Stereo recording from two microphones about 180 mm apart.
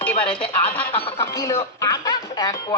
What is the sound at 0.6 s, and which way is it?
Speech, 10° left (ahead or behind).